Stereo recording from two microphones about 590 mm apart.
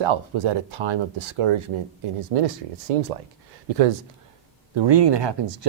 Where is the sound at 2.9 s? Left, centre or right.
Right.